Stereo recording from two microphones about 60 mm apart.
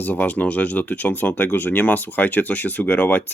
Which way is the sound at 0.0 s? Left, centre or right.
Left.